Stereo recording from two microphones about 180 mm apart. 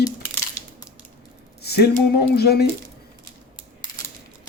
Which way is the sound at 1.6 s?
60° left (ahead or behind).